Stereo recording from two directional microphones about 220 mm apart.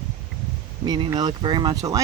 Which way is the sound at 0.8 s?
20° right (ahead or behind).